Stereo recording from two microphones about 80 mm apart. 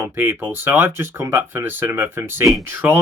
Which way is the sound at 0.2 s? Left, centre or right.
Right.